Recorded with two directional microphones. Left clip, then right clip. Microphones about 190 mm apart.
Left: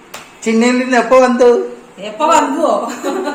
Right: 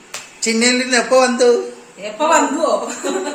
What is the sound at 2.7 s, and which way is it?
Speech, 15° right (ahead or behind).